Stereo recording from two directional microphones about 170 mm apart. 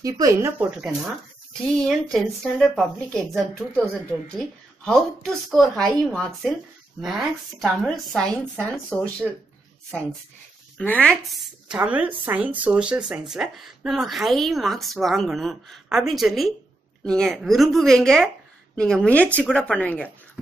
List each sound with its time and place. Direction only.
0.0 s speech: 20° right (ahead or behind)
0.7 s speech: 5° right (ahead or behind)
4.8 s speech: 5° left (ahead or behind)
10.8 s speech: 5° left (ahead or behind)